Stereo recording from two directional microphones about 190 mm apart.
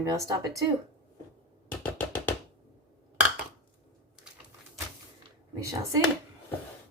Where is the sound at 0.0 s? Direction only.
15° right (ahead or behind).